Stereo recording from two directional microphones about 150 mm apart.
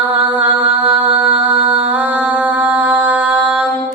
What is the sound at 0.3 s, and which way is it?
Mantra, 10° right (ahead or behind).